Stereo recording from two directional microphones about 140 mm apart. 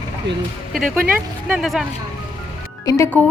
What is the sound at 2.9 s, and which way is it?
Speech, 25° left (ahead or behind).